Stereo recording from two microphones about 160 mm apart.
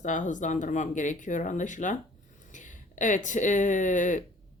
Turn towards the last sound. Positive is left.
turn(degrees=50)  # may be behind; listen again after turning